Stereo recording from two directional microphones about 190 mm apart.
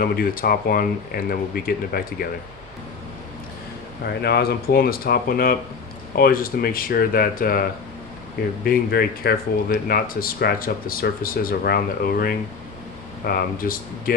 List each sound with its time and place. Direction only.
0.0 s speech: 50° left (ahead or behind)
4.0 s speech: 60° left (ahead or behind)
8.6 s speech: 55° left (ahead or behind)